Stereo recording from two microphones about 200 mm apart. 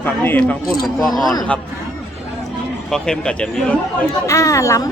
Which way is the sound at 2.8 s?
5° left (ahead or behind).